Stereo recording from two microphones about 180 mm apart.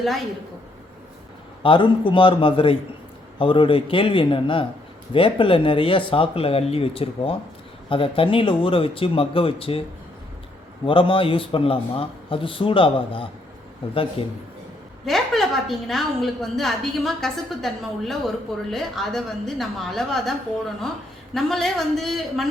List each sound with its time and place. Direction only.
1.6 s a man's voice: 30° left (ahead or behind)
10.8 s a man's voice: 30° left (ahead or behind)
15.0 s a woman's voice: centre (ahead or behind)